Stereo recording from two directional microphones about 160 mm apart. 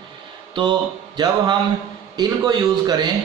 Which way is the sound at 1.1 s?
25° right (ahead or behind).